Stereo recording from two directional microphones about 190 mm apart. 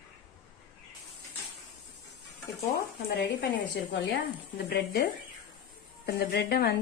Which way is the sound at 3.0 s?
60° left (ahead or behind).